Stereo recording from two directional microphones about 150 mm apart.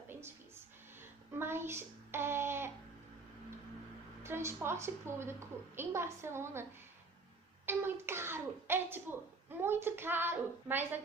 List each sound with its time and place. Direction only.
1.3 s a sound: 15° right (ahead or behind)
4.2 s a woman's voice: 15° right (ahead or behind)
7.6 s a woman's voice: 15° right (ahead or behind)